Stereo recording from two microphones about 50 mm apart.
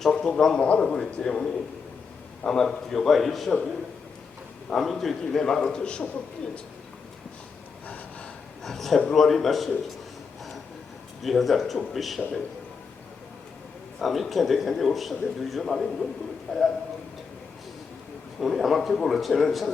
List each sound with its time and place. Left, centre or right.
0.1 s a man's voice: centre
4.7 s a man's voice: centre
8.6 s a man's voice: centre
11.2 s a man's voice: centre
14.0 s a man's voice: centre
18.3 s a man's voice: centre